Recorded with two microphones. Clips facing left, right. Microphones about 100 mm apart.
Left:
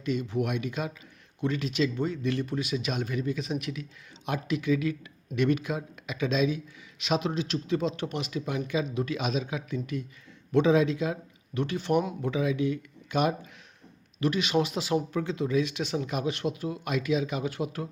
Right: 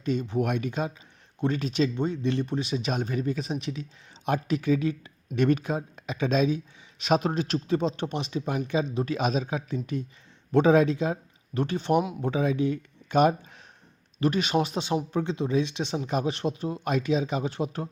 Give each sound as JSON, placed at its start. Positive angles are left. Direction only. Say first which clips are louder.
{"t": 0.0, "sound": "speech", "louder": "right 2 dB", "side_deg": -35}
{"t": 10.5, "sound": "speech", "louder": "right 3 dB", "side_deg": -45}